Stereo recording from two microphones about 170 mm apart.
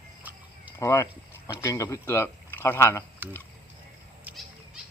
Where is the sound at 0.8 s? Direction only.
15° left (ahead or behind).